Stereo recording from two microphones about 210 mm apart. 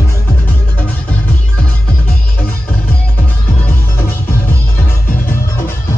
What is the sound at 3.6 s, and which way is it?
Music, 10° left (ahead or behind).